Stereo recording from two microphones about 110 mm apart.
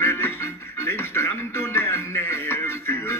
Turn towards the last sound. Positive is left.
turn(degrees=20)  # may be behind; listen again after turning